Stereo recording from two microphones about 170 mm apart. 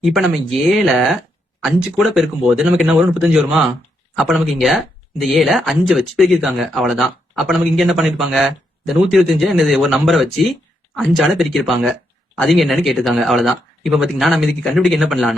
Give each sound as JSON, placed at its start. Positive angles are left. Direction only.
{"t": 0.0, "sound": "speech", "side_deg": 0}